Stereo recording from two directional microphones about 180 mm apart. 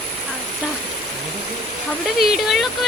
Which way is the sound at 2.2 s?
Centre (ahead or behind).